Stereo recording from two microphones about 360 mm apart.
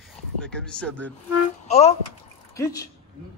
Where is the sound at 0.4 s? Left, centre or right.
Centre.